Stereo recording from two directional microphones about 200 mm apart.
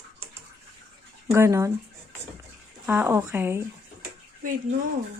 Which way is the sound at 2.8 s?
10° right (ahead or behind).